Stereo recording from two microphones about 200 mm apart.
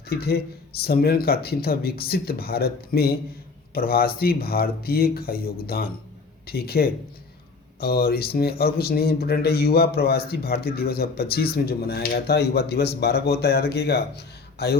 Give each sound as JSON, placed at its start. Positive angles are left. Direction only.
{"t": 0.1, "sound": "speech", "side_deg": 50}